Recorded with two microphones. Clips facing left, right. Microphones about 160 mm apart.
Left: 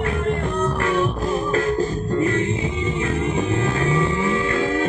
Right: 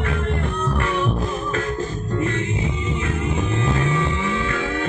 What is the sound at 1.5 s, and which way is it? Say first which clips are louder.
Music: left 4 dB; 35° left (ahead or behind).